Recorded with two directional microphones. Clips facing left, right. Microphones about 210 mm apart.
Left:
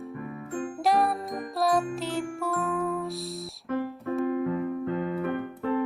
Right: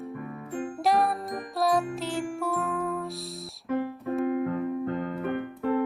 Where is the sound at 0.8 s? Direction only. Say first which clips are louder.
Even; centre (ahead or behind).